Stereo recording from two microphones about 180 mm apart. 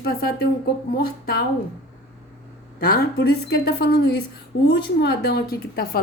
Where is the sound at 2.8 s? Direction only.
60° left (ahead or behind).